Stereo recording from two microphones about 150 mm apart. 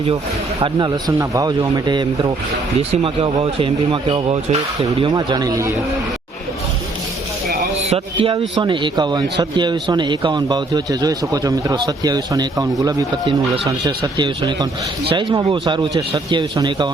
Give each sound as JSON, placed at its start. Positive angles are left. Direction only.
{"t": 0.6, "sound": "a man's voice", "side_deg": -30}
{"t": 2.9, "sound": "speech", "side_deg": -40}
{"t": 5.0, "sound": "a man's voice", "side_deg": -30}
{"t": 7.8, "sound": "a man's voice", "side_deg": -45}